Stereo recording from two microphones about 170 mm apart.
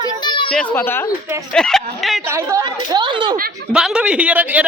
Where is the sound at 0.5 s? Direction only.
10° left (ahead or behind).